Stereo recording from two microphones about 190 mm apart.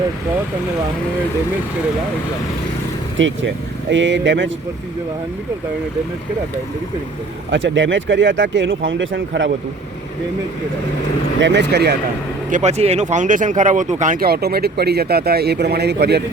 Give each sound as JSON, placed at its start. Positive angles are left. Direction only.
{"t": 3.2, "sound": "speech", "side_deg": -75}
{"t": 7.5, "sound": "speech", "side_deg": -75}
{"t": 11.3, "sound": "speech", "side_deg": -70}
{"t": 12.5, "sound": "speech", "side_deg": -40}